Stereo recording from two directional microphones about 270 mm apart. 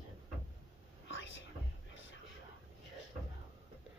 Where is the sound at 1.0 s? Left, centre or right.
Left.